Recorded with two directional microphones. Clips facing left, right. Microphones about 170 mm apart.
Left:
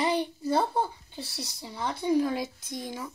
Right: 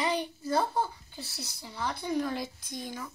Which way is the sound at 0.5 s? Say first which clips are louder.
Left 2 dB; 25° left (ahead or behind).